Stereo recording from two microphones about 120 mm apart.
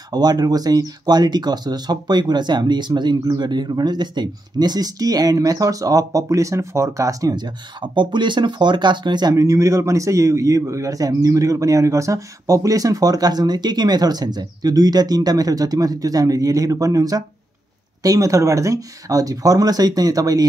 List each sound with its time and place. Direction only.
0.1 s speech: 35° right (ahead or behind)
9.3 s speech: 25° right (ahead or behind)